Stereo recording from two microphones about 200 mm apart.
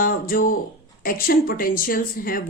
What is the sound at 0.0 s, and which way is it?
Speech, 45° left (ahead or behind).